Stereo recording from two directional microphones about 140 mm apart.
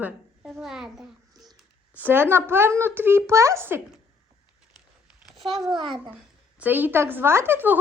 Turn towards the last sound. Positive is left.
turn(degrees=-15)  # may be behind; listen again after turning